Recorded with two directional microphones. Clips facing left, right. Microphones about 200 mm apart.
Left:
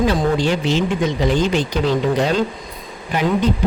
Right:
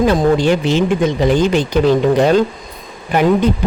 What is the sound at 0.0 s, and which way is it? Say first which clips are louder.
Speech: right 5 dB; 50° right (ahead or behind).